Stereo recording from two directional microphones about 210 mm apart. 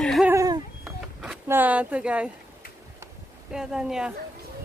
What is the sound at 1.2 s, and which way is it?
Speech, 5° right (ahead or behind).